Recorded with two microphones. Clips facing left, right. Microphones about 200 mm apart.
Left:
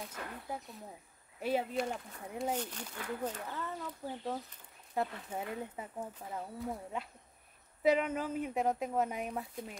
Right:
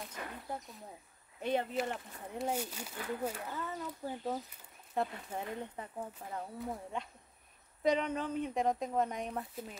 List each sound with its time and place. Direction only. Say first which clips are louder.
1.4 s speech: even; 5° left (ahead or behind)